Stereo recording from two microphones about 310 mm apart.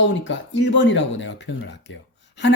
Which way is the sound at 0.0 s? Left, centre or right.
Left.